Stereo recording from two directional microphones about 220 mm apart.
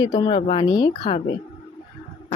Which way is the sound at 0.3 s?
25° left (ahead or behind).